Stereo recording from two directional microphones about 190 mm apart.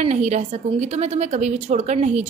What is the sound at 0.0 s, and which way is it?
A woman's voice, 35° right (ahead or behind).